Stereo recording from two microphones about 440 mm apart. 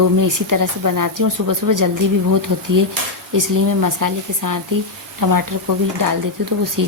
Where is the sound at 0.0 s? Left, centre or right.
Right.